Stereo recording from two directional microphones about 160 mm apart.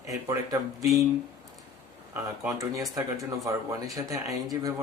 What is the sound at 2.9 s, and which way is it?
A man's voice, 20° right (ahead or behind).